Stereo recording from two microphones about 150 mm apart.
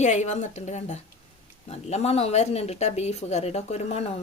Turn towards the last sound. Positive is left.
turn(degrees=45)  # may be behind; listen again after turning